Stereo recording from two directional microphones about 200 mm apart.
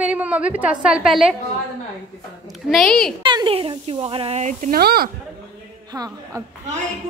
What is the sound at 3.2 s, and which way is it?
Speech, 25° right (ahead or behind).